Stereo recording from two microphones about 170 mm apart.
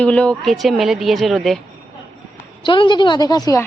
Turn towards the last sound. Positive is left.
turn(degrees=20)  # may be behind; listen again after turning